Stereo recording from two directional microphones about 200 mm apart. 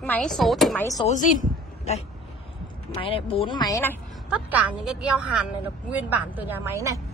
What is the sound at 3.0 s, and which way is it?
Speech, 25° left (ahead or behind).